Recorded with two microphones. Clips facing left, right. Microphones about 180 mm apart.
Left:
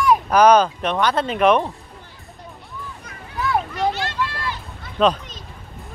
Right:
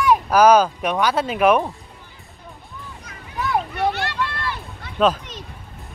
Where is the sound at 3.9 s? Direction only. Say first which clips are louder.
Even; 60° right (ahead or behind).